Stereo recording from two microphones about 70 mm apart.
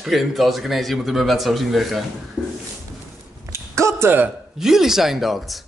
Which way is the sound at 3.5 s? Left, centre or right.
Right.